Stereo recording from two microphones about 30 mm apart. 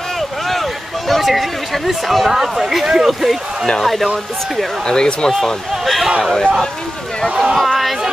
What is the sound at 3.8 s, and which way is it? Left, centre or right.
Speech, centre.